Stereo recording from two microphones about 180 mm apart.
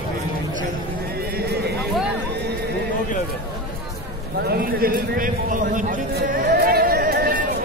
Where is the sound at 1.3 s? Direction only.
60° right (ahead or behind).